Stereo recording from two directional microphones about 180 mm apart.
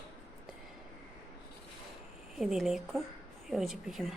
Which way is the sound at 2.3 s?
Centre (ahead or behind).